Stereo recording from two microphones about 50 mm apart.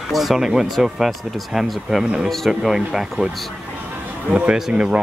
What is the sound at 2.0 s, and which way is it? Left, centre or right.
Speech, centre.